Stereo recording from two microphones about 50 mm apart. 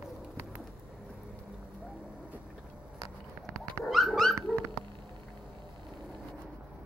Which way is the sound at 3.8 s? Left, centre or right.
Centre.